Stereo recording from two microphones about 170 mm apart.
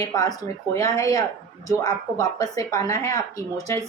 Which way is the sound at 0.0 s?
20° left (ahead or behind).